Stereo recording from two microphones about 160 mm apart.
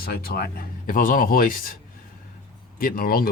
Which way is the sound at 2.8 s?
60° left (ahead or behind).